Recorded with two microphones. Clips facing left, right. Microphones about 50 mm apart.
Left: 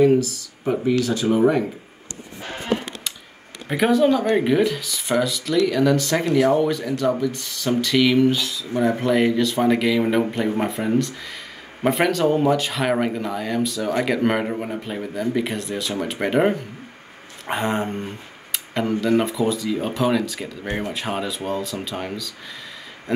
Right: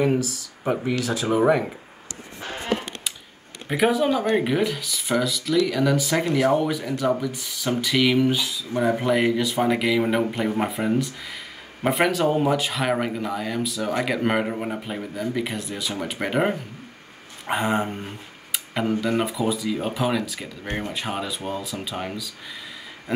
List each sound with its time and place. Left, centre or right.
0.0 s speech: centre
3.6 s speech: centre
23.1 s a sound: centre